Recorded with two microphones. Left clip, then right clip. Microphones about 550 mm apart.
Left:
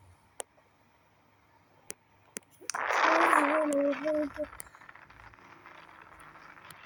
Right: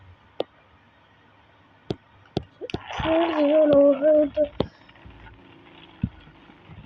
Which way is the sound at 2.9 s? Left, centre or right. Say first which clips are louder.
Right 1 dB; left.